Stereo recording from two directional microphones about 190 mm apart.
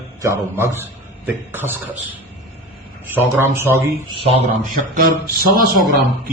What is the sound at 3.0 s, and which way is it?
Speech, 10° right (ahead or behind).